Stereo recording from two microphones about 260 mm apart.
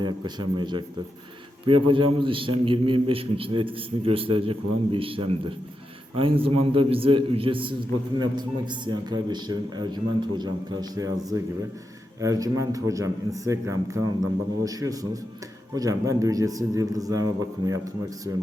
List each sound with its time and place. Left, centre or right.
0.0 s a man's voice: centre